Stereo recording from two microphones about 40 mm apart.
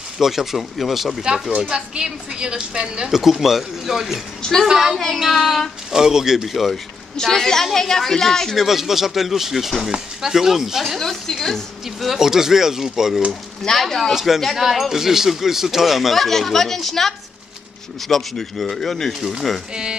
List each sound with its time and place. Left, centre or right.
0.2 s speech: centre
1.6 s speech: centre
3.1 s speech: centre
4.4 s a woman's voice: centre
5.9 s speech: centre
7.2 s a woman's voice: centre
8.5 s speech: centre
9.8 s speech: centre
11.0 s a woman's voice: centre
12.1 s speech: centre
13.3 s a woman's voice: centre
14.1 s speech: centre
19.7 s speech: right